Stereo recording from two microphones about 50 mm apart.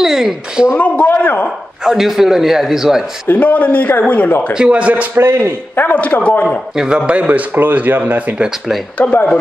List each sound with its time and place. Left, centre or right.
0.0 s a sound: centre
0.7 s a man's voice: left
1.9 s a man's voice: centre
3.3 s a man's voice: left
4.6 s speech: right
5.1 s a man's voice: right
5.8 s a man's voice: left
6.7 s a man's voice: centre
7.1 s speech: right
8.9 s speech: left